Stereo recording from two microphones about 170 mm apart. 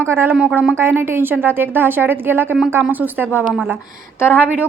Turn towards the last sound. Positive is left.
turn(degrees=-10)  # may be behind; listen again after turning